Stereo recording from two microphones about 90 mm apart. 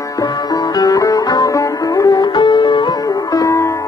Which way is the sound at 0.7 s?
40° left (ahead or behind).